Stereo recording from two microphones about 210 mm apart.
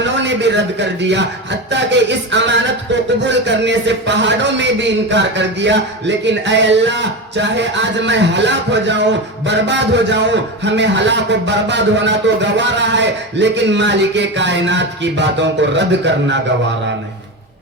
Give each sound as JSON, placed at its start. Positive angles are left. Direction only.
{"t": 0.0, "sound": "a man's voice", "side_deg": -55}